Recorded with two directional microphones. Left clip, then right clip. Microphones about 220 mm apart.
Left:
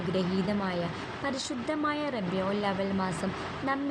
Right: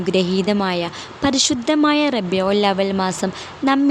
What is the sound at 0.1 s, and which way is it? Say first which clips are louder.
A woman's voice: right 13 dB; 50° right (ahead or behind).